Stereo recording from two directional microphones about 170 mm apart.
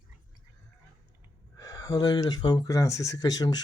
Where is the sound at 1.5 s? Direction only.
20° left (ahead or behind).